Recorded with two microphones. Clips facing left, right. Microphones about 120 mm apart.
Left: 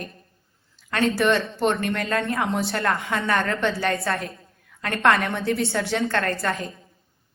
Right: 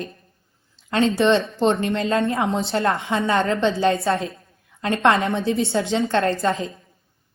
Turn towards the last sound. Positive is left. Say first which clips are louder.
# right 5 dB
turn(degrees=-25)  # may be behind; listen again after turning